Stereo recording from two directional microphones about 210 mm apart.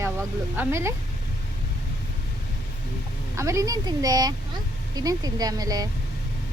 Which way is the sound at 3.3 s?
15° right (ahead or behind).